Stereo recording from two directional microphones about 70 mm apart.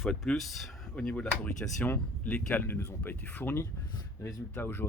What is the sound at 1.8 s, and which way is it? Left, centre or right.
Speech, left.